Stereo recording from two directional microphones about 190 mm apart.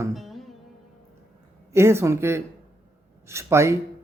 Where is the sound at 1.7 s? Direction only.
15° right (ahead or behind).